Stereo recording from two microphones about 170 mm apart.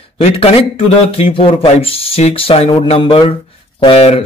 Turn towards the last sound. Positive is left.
turn(degrees=35)  # may be behind; listen again after turning